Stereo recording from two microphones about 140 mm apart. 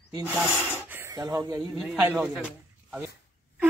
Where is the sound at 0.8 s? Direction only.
15° right (ahead or behind).